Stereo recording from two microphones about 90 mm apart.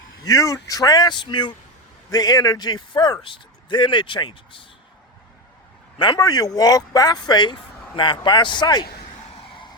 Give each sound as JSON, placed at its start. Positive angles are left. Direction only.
{"t": 0.3, "sound": "a man's voice", "side_deg": 40}
{"t": 2.0, "sound": "a man's voice", "side_deg": 45}
{"t": 6.1, "sound": "a man's voice", "side_deg": 45}